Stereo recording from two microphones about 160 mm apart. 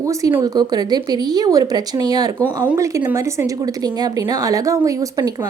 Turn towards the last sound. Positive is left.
turn(degrees=-20)  # may be behind; listen again after turning